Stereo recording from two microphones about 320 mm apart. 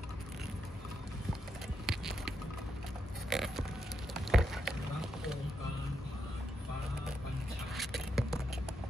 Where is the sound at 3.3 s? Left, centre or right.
Centre.